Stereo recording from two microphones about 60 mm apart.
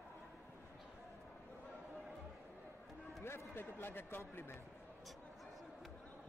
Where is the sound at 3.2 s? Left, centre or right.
Left.